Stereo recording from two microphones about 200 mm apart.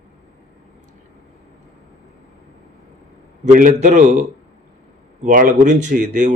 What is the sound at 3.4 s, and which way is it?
Speech, 40° right (ahead or behind).